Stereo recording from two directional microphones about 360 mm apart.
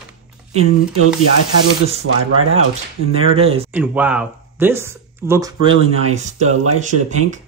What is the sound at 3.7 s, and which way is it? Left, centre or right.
Speech, centre.